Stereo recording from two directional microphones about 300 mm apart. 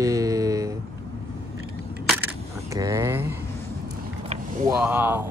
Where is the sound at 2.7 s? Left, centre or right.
Centre.